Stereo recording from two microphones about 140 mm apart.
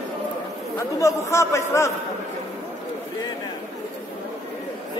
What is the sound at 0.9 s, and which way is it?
Speech, 20° left (ahead or behind).